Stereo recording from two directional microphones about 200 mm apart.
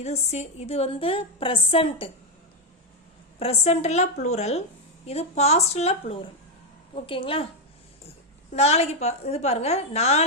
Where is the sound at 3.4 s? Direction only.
30° left (ahead or behind).